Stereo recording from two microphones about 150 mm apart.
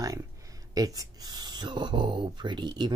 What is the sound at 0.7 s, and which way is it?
Speech, 25° right (ahead or behind).